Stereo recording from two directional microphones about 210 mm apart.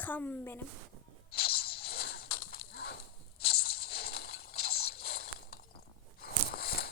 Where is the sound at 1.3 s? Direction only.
50° left (ahead or behind).